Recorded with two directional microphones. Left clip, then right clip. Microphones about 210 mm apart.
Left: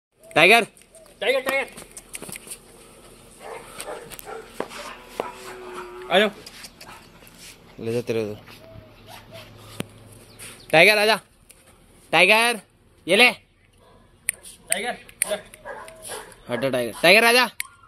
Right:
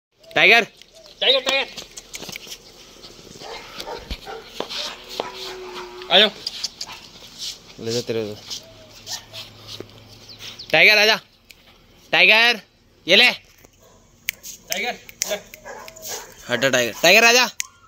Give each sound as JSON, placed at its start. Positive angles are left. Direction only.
{"t": 0.3, "sound": "speech", "side_deg": 10}
{"t": 2.2, "sound": "a sound", "side_deg": -30}
{"t": 4.6, "sound": "chopping", "side_deg": 0}
{"t": 6.0, "sound": "speech", "side_deg": 10}
{"t": 6.4, "sound": "dog", "side_deg": 25}
{"t": 7.8, "sound": "speech", "side_deg": 5}
{"t": 10.7, "sound": "speech", "side_deg": 5}
{"t": 14.2, "sound": "a sound", "side_deg": -20}
{"t": 16.4, "sound": "speech", "side_deg": 0}